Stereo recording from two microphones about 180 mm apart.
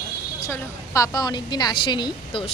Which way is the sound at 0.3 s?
15° left (ahead or behind).